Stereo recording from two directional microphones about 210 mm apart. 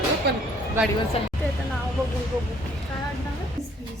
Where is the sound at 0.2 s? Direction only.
50° right (ahead or behind).